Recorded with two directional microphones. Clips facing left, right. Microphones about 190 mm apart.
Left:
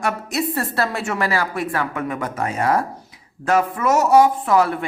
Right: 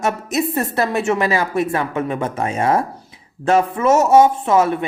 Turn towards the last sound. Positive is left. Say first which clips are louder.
# right 2 dB
turn(degrees=-20)  # may be behind; listen again after turning